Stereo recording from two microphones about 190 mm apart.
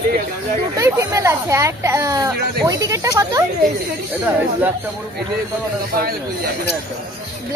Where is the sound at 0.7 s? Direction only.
15° right (ahead or behind).